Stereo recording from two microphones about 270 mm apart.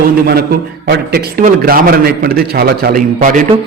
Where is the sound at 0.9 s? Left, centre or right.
Right.